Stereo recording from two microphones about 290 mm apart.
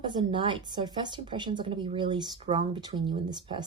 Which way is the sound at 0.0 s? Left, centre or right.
Centre.